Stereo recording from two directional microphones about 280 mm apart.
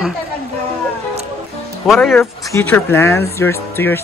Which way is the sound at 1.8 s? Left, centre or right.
Centre.